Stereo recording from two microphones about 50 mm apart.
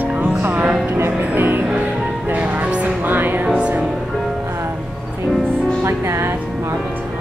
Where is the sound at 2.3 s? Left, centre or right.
Right.